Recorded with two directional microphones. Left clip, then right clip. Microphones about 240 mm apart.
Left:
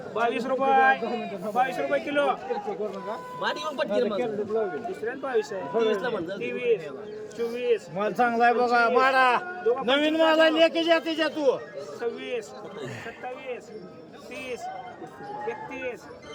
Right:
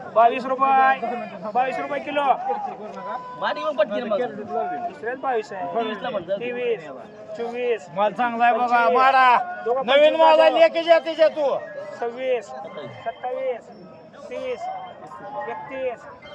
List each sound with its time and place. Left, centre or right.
0.1 s a man's voice: centre
14.3 s a man's voice: centre